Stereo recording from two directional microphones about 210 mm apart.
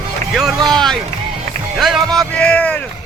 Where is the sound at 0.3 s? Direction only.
Centre (ahead or behind).